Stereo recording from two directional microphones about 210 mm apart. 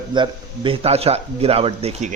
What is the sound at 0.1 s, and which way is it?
A man's voice, 20° right (ahead or behind).